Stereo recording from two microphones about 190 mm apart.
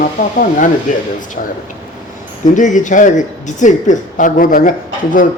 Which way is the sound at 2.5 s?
40° left (ahead or behind).